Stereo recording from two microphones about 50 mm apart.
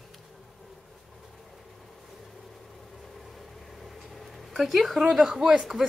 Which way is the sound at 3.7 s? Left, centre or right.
Centre.